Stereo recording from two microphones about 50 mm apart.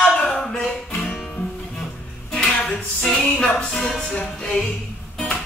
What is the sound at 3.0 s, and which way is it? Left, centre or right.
Music, centre.